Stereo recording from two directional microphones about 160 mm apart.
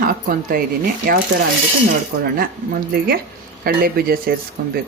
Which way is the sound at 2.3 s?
65° right (ahead or behind).